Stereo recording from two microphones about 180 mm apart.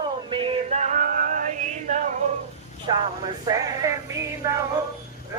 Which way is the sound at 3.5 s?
20° right (ahead or behind).